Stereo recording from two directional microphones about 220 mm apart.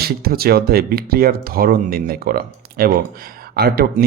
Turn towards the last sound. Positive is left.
turn(degrees=-45)  # may be behind; listen again after turning